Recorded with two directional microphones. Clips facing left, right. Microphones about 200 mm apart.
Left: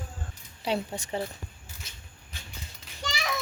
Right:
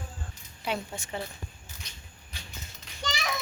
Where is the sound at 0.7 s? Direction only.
35° left (ahead or behind).